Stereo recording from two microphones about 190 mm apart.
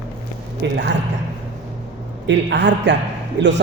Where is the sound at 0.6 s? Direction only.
65° right (ahead or behind).